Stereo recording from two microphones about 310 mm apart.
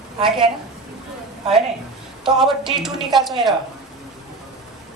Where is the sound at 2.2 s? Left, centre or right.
Centre.